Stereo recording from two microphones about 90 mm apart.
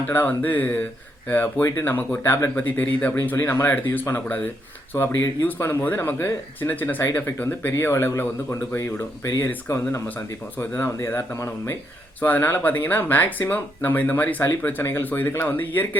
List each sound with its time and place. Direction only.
0.1 s speech: 20° left (ahead or behind)